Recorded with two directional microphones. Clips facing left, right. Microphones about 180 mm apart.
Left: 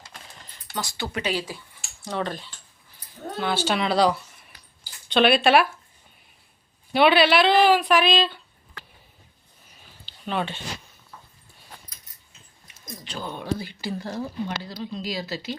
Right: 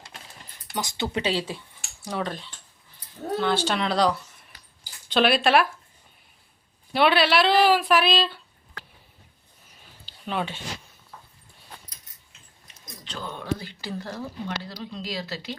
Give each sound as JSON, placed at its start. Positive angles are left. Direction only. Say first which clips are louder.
{"t": 0.7, "sound": "speech", "louder": "right 2 dB", "side_deg": -20}
{"t": 2.0, "sound": "speech", "louder": "left 1 dB", "side_deg": -5}
{"t": 6.9, "sound": "speech", "louder": "left 2 dB", "side_deg": 0}
{"t": 10.1, "sound": "a sound", "louder": "left 1 dB", "side_deg": -5}
{"t": 13.1, "sound": "speech", "louder": "left 1 dB", "side_deg": 10}